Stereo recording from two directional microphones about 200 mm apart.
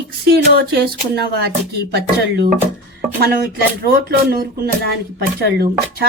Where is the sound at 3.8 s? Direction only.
50° right (ahead or behind).